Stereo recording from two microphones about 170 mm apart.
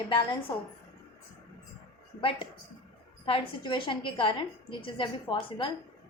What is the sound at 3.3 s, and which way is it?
A woman's voice, 30° left (ahead or behind).